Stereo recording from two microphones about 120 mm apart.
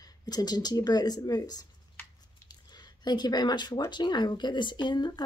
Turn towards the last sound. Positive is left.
turn(degrees=40)  # may be behind; listen again after turning